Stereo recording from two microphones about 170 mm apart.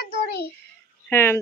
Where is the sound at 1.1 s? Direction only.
15° left (ahead or behind).